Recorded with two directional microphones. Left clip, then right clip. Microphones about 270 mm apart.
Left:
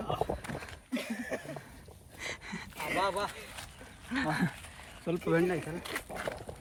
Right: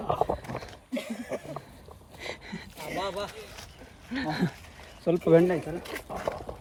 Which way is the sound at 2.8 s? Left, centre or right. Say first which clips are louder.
Left 2 dB; left.